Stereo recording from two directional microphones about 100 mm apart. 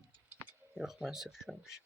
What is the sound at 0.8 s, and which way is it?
Speech, 5° right (ahead or behind).